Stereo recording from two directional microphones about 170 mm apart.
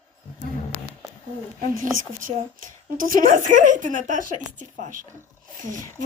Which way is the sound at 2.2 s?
55° right (ahead or behind).